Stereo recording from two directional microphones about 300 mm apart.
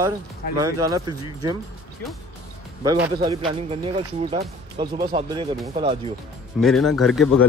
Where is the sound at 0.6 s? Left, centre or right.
Centre.